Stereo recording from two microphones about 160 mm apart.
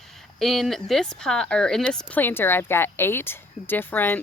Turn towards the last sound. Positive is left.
turn(degrees=10)  # may be behind; listen again after turning